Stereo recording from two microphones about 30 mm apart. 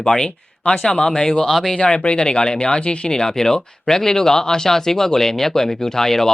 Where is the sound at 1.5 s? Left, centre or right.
Centre.